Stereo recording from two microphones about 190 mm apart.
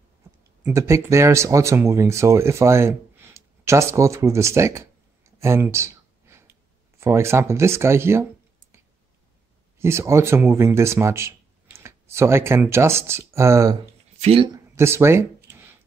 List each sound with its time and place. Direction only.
0.7 s speech: 15° right (ahead or behind)
9.8 s speech: 15° right (ahead or behind)
14.2 s speech: 30° right (ahead or behind)
14.5 s a sound: 15° right (ahead or behind)